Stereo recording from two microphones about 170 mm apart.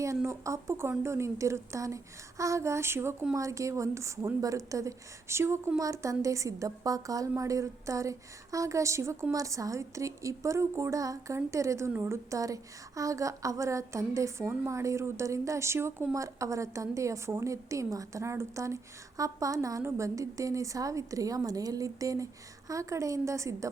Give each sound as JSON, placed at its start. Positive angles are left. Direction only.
{"t": 0.0, "sound": "a woman's voice", "side_deg": -15}